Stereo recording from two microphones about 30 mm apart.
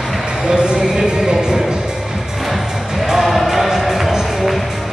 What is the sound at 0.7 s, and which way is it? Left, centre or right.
Music, right.